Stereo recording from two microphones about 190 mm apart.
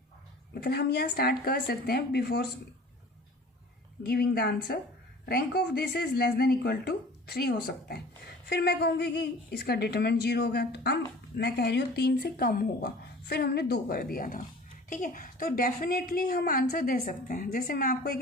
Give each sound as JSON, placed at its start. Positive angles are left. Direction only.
{"t": 0.5, "sound": "speech", "side_deg": 55}
{"t": 4.0, "sound": "a woman's voice", "side_deg": 55}